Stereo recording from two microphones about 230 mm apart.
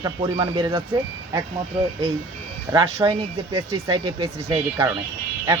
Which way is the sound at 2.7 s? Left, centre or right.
Centre.